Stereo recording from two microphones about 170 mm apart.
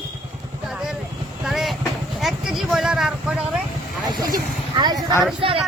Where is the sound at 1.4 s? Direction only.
Centre (ahead or behind).